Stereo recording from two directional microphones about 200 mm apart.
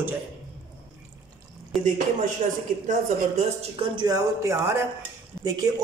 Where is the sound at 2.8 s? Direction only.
35° right (ahead or behind).